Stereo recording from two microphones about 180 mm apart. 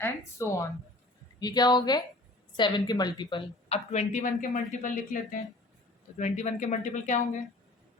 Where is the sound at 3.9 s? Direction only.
40° left (ahead or behind).